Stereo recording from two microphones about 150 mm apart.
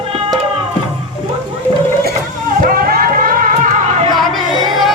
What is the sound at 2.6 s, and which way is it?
Music, 75° right (ahead or behind).